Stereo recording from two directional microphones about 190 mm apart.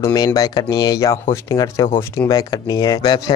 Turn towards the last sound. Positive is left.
turn(degrees=20)  # may be behind; listen again after turning